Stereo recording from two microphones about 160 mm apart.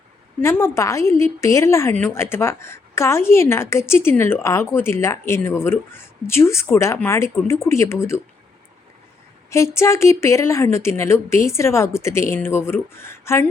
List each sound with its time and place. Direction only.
0.4 s a woman's voice: 15° left (ahead or behind)
9.5 s a woman's voice: 15° left (ahead or behind)